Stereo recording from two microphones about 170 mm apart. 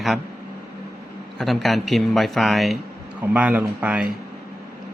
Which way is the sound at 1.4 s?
Centre (ahead or behind).